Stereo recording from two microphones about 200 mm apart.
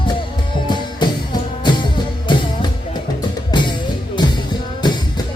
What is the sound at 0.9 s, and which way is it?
Music, 20° left (ahead or behind).